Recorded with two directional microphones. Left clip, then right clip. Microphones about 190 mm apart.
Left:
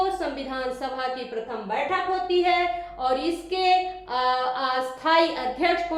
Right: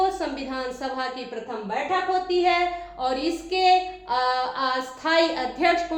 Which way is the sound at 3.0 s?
20° right (ahead or behind).